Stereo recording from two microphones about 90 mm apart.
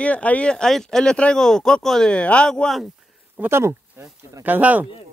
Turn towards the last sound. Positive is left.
turn(degrees=-20)  # may be behind; listen again after turning